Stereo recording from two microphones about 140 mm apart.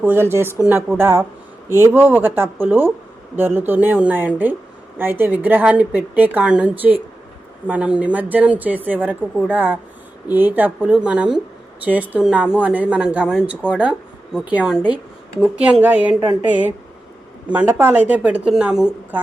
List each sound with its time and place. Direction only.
0.0 s a woman's voice: 15° right (ahead or behind)